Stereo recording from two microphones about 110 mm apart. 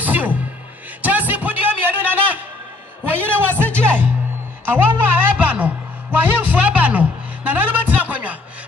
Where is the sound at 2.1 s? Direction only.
15° right (ahead or behind).